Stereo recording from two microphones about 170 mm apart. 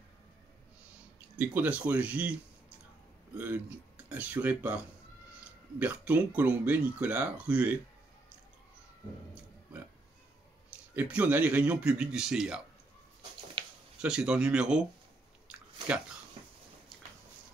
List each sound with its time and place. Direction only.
1.4 s speech: 10° right (ahead or behind)
3.3 s speech: 10° right (ahead or behind)
11.0 s speech: 10° right (ahead or behind)
13.6 s a sound: 25° right (ahead or behind)
14.0 s speech: 5° right (ahead or behind)